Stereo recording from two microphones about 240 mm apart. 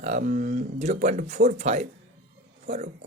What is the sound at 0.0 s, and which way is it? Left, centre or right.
Speech, right.